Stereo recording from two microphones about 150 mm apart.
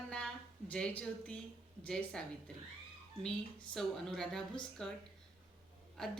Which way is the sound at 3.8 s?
5° left (ahead or behind).